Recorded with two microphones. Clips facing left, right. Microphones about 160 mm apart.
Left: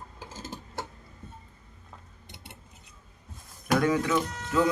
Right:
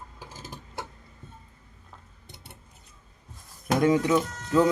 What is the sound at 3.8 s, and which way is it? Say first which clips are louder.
Speech: right 5 dB; 25° right (ahead or behind).